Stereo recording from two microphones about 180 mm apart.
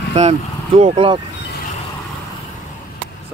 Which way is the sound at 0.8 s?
30° right (ahead or behind).